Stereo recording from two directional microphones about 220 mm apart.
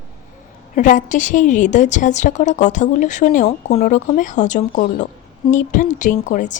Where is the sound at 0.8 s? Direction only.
35° left (ahead or behind).